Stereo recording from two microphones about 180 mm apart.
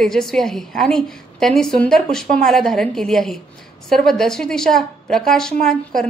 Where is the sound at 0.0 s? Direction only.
5° left (ahead or behind).